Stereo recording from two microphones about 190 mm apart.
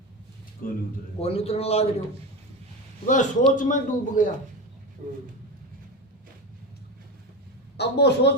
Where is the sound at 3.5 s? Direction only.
45° left (ahead or behind).